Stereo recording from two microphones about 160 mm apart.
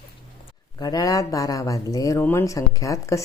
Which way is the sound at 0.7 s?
25° left (ahead or behind).